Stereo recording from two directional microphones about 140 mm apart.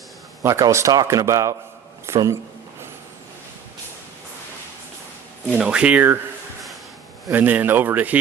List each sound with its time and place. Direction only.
0.4 s a man's voice: 20° right (ahead or behind)
5.5 s speech: 5° right (ahead or behind)
7.3 s speech: 15° right (ahead or behind)